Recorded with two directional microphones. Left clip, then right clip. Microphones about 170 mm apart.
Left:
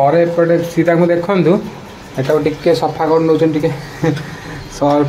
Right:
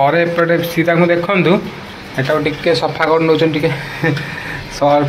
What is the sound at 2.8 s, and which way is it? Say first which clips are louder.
Speech: even; 5° left (ahead or behind).